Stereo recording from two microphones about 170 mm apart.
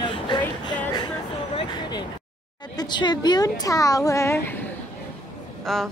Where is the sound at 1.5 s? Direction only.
25° left (ahead or behind).